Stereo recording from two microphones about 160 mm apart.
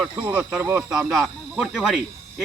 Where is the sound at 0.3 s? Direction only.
15° right (ahead or behind).